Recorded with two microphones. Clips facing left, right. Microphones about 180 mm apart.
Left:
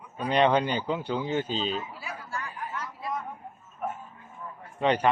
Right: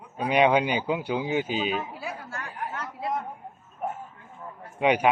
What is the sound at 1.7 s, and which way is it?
Chatter, 65° right (ahead or behind).